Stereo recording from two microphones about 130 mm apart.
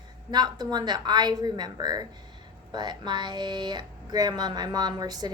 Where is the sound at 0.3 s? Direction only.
30° right (ahead or behind).